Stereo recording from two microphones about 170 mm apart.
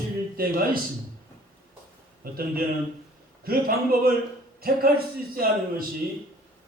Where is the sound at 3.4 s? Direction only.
60° right (ahead or behind).